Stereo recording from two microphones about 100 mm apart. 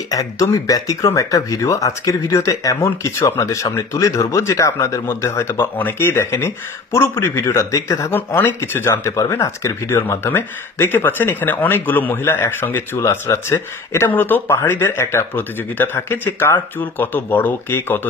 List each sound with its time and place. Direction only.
0.1 s speech: 35° left (ahead or behind)
8.1 s speech: 20° left (ahead or behind)